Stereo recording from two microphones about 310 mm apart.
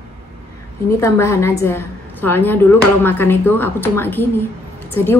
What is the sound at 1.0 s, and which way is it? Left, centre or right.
A woman's voice, centre.